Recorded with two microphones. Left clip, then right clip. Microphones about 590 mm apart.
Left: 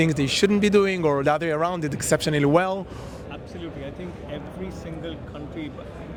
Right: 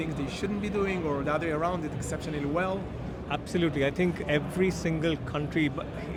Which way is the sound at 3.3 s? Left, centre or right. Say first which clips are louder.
Right 11 dB; right.